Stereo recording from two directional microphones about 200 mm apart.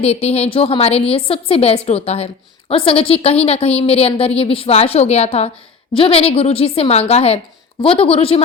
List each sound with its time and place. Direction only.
0.0 s a woman's voice: 30° left (ahead or behind)